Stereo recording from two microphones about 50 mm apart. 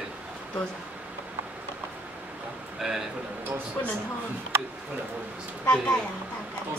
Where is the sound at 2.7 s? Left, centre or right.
Centre.